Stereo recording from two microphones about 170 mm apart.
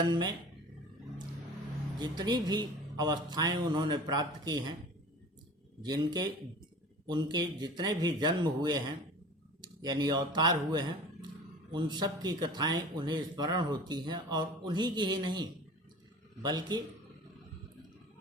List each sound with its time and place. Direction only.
0.0 s speech: 25° right (ahead or behind)
2.0 s speech: 25° right (ahead or behind)
5.8 s speech: 25° right (ahead or behind)